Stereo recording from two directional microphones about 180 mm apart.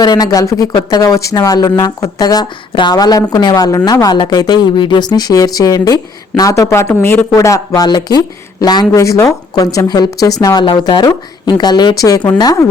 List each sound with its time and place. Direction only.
0.0 s speech: 20° left (ahead or behind)